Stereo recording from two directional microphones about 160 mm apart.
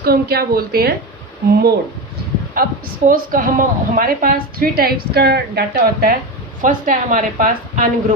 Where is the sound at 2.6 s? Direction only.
65° right (ahead or behind).